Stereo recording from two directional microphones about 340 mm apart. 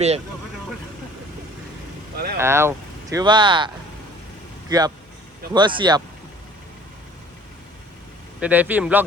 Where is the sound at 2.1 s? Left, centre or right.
Right.